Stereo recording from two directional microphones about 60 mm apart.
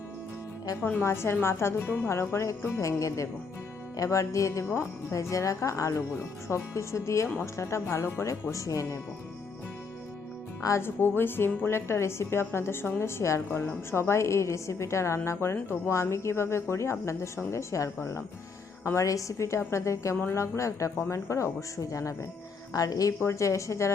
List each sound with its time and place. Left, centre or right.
0.8 s a woman's voice: left
1.0 s a woman's voice: left
3.9 s speech: left
5.1 s a woman's voice: left
8.3 s speech: left
10.8 s a woman's voice: left
22.7 s speech: left
23.2 s speech: left